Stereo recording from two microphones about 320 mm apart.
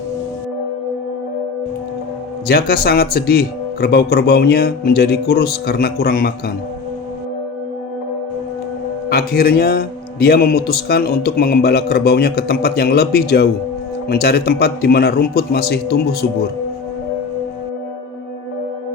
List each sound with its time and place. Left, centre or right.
2.5 s a man's voice: left
9.0 s a man's voice: left